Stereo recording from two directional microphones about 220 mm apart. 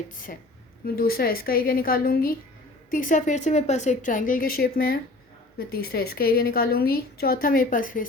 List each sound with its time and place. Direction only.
0.9 s a woman's voice: 40° left (ahead or behind)